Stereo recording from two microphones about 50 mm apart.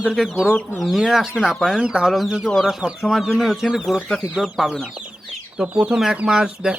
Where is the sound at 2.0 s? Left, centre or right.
Centre.